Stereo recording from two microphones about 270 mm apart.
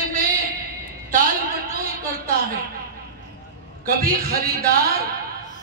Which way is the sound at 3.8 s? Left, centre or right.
Right.